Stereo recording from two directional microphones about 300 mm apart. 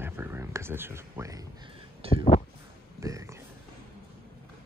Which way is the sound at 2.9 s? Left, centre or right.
Centre.